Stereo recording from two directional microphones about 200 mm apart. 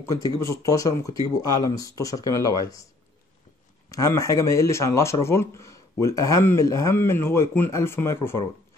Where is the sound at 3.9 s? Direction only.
15° left (ahead or behind).